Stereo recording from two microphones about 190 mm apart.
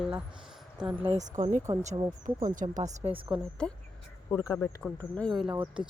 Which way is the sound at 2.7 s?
35° right (ahead or behind).